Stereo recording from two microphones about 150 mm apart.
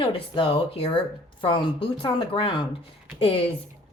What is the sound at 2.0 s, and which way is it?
A woman's voice, 35° left (ahead or behind).